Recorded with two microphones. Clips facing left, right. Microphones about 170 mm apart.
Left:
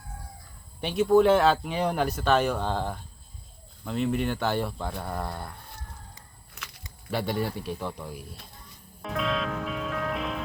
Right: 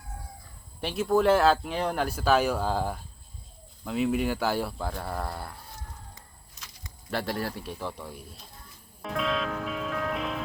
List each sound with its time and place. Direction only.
0.8 s speech: centre (ahead or behind)
6.5 s a sound: 60° left (ahead or behind)
7.1 s speech: centre (ahead or behind)
9.0 s music: centre (ahead or behind)